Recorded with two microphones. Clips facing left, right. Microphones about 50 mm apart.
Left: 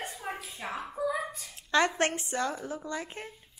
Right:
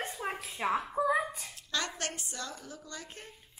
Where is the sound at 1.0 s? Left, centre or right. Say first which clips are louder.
Right 2 dB; right.